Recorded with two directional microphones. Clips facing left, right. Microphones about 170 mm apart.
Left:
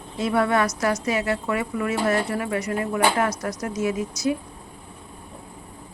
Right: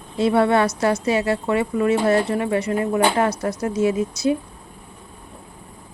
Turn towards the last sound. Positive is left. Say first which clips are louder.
# right 4 dB
turn(degrees=-30)  # may be behind; listen again after turning